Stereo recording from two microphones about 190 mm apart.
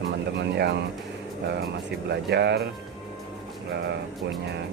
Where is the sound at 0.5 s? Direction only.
60° right (ahead or behind).